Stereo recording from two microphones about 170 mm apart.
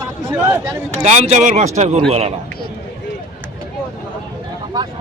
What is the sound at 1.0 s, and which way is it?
A man's voice, 45° right (ahead or behind).